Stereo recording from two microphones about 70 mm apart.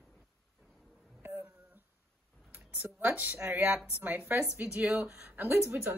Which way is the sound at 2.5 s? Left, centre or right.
Right.